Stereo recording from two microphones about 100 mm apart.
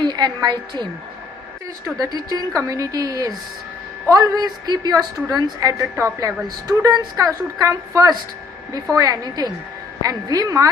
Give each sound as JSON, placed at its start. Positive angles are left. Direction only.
{"t": 0.0, "sound": "a woman's voice", "side_deg": -45}
{"t": 2.0, "sound": "a woman's voice", "side_deg": -40}